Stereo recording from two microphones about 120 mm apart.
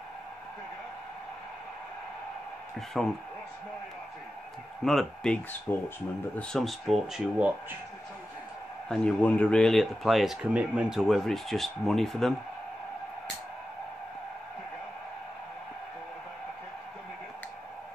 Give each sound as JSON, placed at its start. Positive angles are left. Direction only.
{"t": 2.9, "sound": "speech", "side_deg": 0}
{"t": 4.8, "sound": "speech", "side_deg": 5}
{"t": 8.8, "sound": "speech", "side_deg": 10}